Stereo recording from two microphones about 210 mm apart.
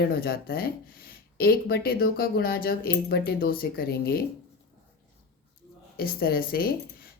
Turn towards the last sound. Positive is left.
turn(degrees=45)  # may be behind; listen again after turning